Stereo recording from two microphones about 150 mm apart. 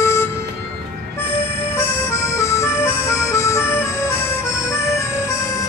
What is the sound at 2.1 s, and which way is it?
Music, 20° left (ahead or behind).